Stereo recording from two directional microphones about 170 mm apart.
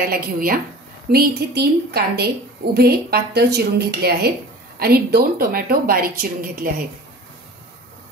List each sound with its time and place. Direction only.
0.0 s a woman's voice: 60° right (ahead or behind)
1.1 s a woman's voice: 70° right (ahead or behind)